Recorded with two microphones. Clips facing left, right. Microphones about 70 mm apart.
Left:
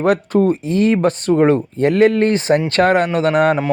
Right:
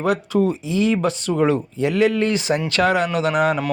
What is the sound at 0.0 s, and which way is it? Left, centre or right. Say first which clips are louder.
A man's voice: left 4 dB; left.